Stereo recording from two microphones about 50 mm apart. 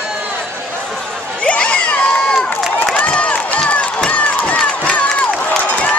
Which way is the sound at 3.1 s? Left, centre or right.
Left.